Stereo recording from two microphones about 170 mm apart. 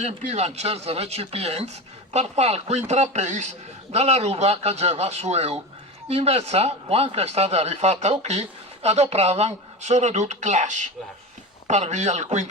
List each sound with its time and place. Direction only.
0.0 s a man's voice: 40° right (ahead or behind)